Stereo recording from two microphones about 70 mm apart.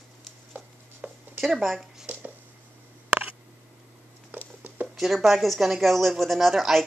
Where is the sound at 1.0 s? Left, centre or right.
Right.